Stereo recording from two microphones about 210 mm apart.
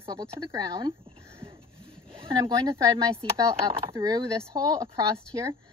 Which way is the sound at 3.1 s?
20° right (ahead or behind).